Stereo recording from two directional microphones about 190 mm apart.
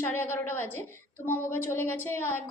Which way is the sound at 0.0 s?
10° left (ahead or behind).